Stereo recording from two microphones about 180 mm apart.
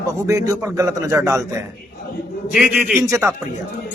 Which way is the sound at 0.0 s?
15° right (ahead or behind).